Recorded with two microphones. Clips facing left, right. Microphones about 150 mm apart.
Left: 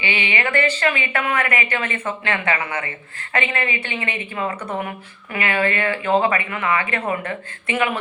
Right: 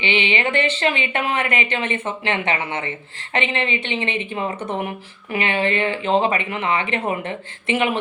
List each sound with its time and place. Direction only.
0.0 s a woman's voice: 20° right (ahead or behind)